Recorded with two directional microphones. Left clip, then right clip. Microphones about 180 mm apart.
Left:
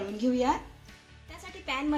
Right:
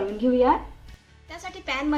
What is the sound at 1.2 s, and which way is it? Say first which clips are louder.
Music: right 5 dB; 55° left (ahead or behind).